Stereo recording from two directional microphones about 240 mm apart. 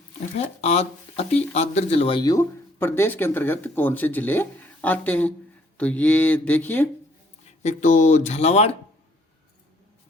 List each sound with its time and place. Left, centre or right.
0.3 s speech: left; by 6.8 s centre
7.6 s speech: left